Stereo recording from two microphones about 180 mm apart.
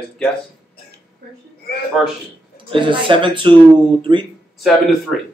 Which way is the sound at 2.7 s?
25° right (ahead or behind).